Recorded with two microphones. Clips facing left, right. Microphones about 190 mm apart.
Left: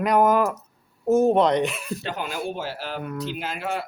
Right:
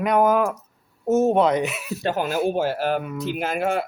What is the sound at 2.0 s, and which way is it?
Speech, 45° right (ahead or behind).